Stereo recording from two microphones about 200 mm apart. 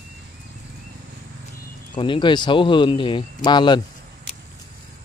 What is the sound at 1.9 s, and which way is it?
Speech, 25° left (ahead or behind).